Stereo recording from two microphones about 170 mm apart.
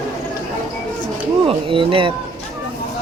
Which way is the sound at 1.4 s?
30° right (ahead or behind).